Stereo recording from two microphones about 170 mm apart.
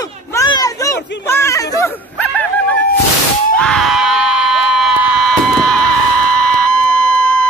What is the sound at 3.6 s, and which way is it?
Screaming, centre (ahead or behind).